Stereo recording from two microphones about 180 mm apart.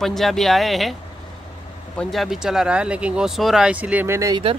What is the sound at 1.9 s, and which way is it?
Speech, centre (ahead or behind).